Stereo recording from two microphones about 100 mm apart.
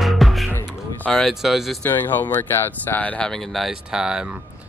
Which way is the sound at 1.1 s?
Centre (ahead or behind).